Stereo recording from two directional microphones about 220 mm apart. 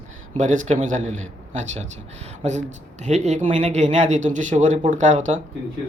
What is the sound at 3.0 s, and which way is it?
Speech, 30° right (ahead or behind).